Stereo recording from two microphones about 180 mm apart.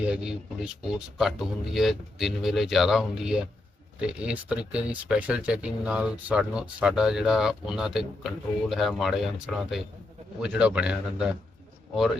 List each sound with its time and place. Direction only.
0.1 s speech: 5° right (ahead or behind)